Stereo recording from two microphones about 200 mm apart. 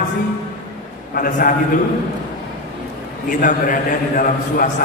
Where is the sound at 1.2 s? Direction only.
45° left (ahead or behind).